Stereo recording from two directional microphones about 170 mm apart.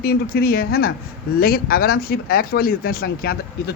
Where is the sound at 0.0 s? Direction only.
65° left (ahead or behind).